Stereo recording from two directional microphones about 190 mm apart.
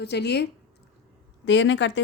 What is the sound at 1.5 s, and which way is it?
Speech, 70° left (ahead or behind).